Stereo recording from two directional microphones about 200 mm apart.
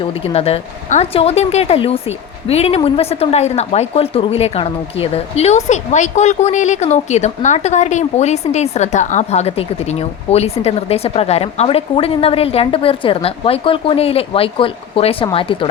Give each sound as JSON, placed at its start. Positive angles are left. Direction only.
{"t": 0.0, "sound": "speech", "side_deg": 30}